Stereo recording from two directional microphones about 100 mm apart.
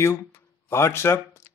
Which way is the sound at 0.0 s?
25° left (ahead or behind).